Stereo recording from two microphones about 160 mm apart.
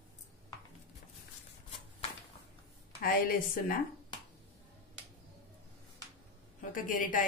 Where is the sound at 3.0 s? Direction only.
65° left (ahead or behind).